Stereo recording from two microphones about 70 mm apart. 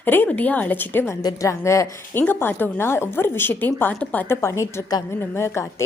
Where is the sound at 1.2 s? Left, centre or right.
Left.